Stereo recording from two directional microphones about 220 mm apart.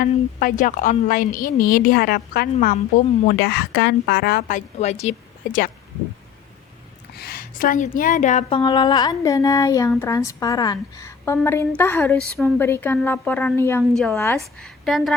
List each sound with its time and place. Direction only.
0.0 s a woman's voice: 40° left (ahead or behind)
7.2 s a woman's voice: 45° left (ahead or behind); by 15.1 s centre (ahead or behind)